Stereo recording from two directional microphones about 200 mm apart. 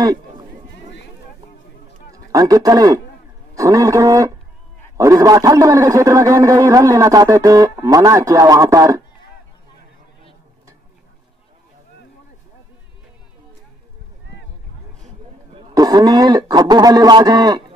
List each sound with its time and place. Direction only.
2.1 s a man's voice: 15° right (ahead or behind)
15.7 s a man's voice: 20° right (ahead or behind)